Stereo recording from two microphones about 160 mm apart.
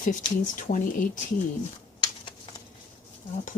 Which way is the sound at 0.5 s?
55° left (ahead or behind).